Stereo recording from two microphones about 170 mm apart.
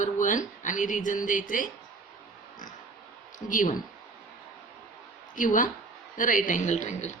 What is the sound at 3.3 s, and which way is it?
Speech, 50° left (ahead or behind).